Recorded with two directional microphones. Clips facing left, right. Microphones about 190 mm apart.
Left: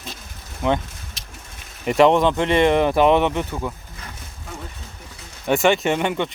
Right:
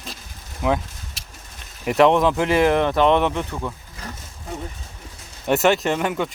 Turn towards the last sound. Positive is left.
turn(degrees=0)  # may be behind; listen again after turning